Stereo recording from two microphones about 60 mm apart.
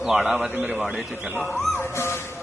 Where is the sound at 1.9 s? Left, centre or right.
Left.